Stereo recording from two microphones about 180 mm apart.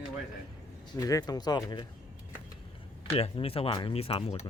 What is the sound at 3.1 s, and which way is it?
Speech, 35° left (ahead or behind).